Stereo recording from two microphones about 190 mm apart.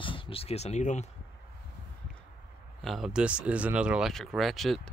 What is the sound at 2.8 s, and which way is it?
Speech, centre (ahead or behind).